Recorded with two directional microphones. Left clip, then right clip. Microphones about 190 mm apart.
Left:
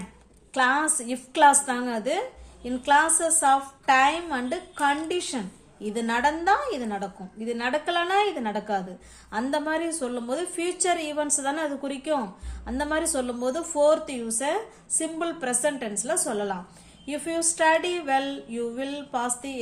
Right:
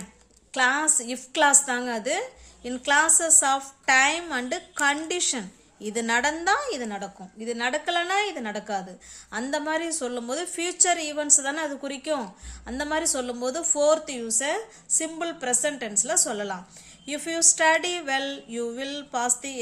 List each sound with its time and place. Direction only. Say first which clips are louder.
0.5 s a woman's voice: even; 25° right (ahead or behind)